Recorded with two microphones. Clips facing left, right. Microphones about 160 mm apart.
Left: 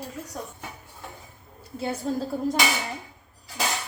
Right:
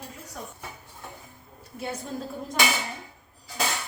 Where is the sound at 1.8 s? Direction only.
35° left (ahead or behind).